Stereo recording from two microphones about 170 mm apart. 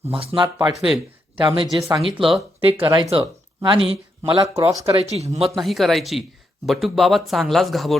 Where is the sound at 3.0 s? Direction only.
30° right (ahead or behind).